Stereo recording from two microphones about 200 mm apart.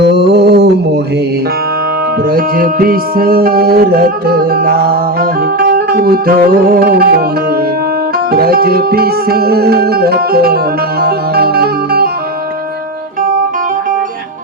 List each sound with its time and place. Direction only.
0.0 s a sound: 55° right (ahead or behind)
2.3 s music: 45° right (ahead or behind)
8.3 s music: 50° right (ahead or behind)